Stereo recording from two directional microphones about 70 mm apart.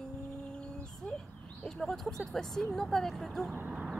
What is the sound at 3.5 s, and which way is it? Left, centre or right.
Speech, right.